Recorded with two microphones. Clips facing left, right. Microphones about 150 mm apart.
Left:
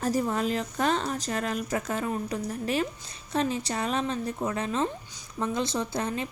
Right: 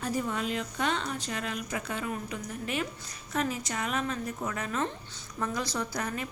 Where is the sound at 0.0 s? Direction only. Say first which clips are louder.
Left 5 dB; 40° left (ahead or behind).